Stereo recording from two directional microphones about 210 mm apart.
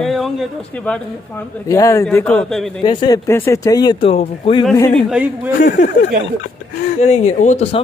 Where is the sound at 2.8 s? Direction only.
20° left (ahead or behind); by 5.9 s 35° left (ahead or behind).